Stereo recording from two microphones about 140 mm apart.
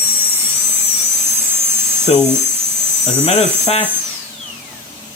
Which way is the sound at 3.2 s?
50° left (ahead or behind).